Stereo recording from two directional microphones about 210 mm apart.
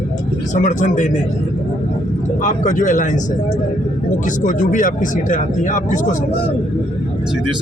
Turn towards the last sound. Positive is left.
turn(degrees=35)  # may be behind; listen again after turning